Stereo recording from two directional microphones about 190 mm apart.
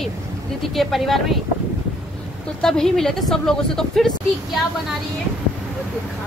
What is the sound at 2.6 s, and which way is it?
A woman's voice, 5° left (ahead or behind).